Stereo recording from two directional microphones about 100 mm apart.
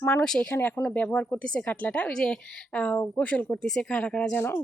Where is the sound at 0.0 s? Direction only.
20° left (ahead or behind).